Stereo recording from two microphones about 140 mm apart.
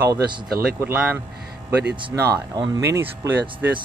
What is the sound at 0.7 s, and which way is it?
Speech, 20° right (ahead or behind).